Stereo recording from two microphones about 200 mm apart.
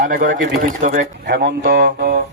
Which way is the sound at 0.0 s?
40° right (ahead or behind).